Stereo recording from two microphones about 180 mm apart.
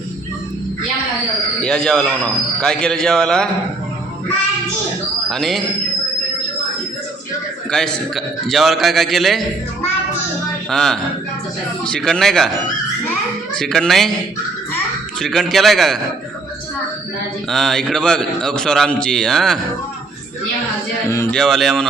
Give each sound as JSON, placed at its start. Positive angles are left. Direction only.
{"t": 1.5, "sound": "a man's voice", "side_deg": 5}
{"t": 5.3, "sound": "a man's voice", "side_deg": 0}
{"t": 7.7, "sound": "a man's voice", "side_deg": 5}
{"t": 10.7, "sound": "a man's voice", "side_deg": 0}
{"t": 13.6, "sound": "a man's voice", "side_deg": 0}
{"t": 15.2, "sound": "a man's voice", "side_deg": 0}
{"t": 17.5, "sound": "a man's voice", "side_deg": 0}
{"t": 21.1, "sound": "speech", "side_deg": 15}
{"t": 21.3, "sound": "a man's voice", "side_deg": 0}